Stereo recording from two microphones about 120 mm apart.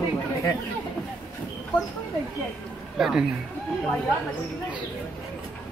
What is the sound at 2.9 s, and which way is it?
Speech, 5° right (ahead or behind).